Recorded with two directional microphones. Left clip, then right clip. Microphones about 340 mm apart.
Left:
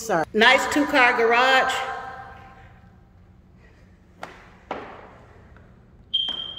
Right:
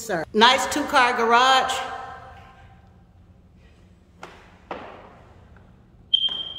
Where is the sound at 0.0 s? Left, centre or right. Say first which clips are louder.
Even; centre.